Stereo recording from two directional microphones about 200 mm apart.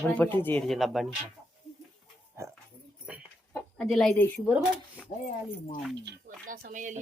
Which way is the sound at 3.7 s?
Centre (ahead or behind).